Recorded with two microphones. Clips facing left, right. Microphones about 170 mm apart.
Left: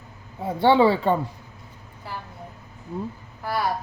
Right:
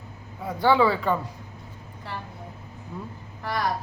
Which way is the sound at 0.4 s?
25° left (ahead or behind).